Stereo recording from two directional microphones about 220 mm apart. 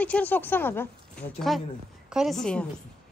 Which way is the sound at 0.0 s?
5° left (ahead or behind).